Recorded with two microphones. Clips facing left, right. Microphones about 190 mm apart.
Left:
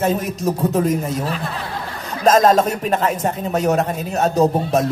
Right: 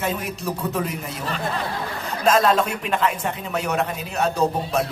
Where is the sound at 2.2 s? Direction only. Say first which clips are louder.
Left 5 dB; 40° left (ahead or behind).